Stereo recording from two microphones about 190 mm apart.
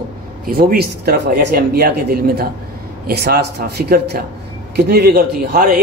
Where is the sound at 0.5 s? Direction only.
55° right (ahead or behind).